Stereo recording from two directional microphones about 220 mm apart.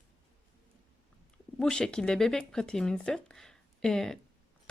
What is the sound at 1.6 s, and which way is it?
Speech, 5° left (ahead or behind).